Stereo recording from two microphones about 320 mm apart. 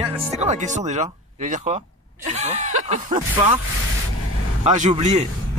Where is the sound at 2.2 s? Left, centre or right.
Right.